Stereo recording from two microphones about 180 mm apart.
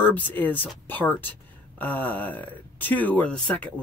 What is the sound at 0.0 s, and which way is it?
Speech, 10° left (ahead or behind).